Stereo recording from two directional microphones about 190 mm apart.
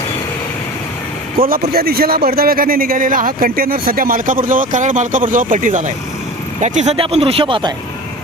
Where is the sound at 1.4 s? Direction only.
50° right (ahead or behind); by 7.8 s 25° right (ahead or behind).